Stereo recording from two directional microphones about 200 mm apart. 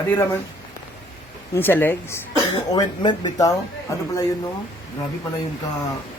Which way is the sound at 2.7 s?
20° left (ahead or behind).